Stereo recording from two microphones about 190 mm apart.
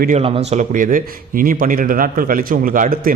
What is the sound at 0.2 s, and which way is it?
Speech, 40° right (ahead or behind).